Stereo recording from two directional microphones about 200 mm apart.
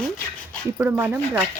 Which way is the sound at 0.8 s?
10° right (ahead or behind).